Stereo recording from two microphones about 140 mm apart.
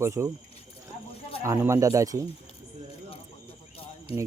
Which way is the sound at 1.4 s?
20° right (ahead or behind).